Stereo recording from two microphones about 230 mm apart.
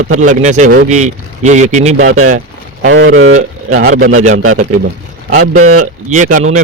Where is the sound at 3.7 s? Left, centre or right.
Right.